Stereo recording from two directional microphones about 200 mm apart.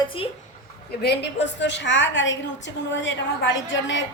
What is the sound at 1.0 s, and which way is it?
A woman's voice, 60° left (ahead or behind).